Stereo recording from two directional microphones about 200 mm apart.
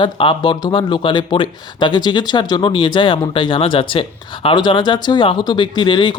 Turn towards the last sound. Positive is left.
turn(degrees=25)  # may be behind; listen again after turning